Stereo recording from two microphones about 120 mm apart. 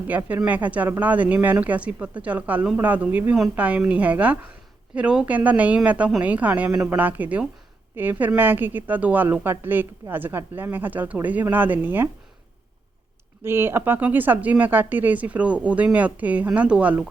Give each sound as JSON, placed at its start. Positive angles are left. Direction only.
{"t": 0.1, "sound": "a woman's voice", "side_deg": -15}
{"t": 13.4, "sound": "a woman's voice", "side_deg": -20}